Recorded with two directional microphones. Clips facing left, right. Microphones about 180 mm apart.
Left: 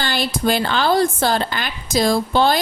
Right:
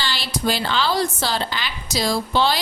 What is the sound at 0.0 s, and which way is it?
Speech, 55° left (ahead or behind).